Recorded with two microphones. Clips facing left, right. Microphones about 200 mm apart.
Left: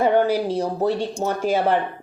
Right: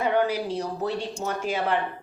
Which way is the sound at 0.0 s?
45° left (ahead or behind).